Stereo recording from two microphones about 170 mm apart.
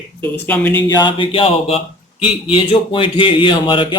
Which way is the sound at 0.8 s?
25° left (ahead or behind).